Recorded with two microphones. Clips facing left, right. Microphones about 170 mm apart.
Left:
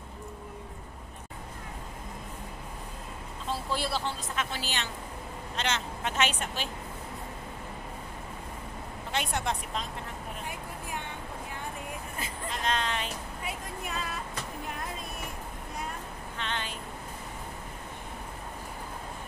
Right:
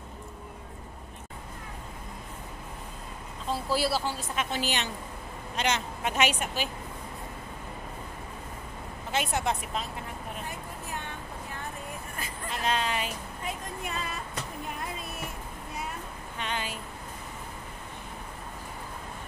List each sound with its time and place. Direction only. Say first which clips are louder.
3.4 s a woman's voice: right 4 dB; 5° right (ahead or behind)
4.4 s a woman's voice: right 5 dB; 15° right (ahead or behind)
9.1 s speech: right 3 dB; 5° right (ahead or behind)
12.4 s a woman's voice: right 2 dB; 5° right (ahead or behind)
13.4 s vehicle: right 3 dB; 10° left (ahead or behind)
16.3 s a sound: right 2 dB; 10° right (ahead or behind)